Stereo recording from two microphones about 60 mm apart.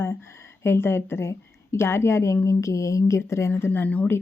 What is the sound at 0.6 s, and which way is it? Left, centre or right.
A woman's voice, left.